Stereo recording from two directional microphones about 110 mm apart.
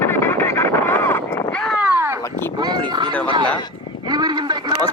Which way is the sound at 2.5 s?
40° right (ahead or behind).